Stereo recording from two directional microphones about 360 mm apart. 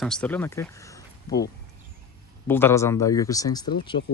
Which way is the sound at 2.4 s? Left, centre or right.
Centre.